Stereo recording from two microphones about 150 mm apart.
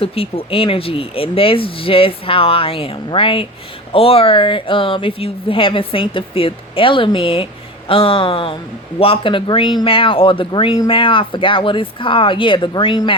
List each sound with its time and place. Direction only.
0.0 s speech: 40° left (ahead or behind)